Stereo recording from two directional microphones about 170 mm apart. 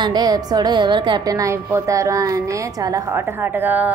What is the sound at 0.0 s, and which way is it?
A woman's voice, 25° right (ahead or behind).